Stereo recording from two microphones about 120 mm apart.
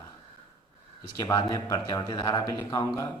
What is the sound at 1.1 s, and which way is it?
A man's voice, 30° left (ahead or behind).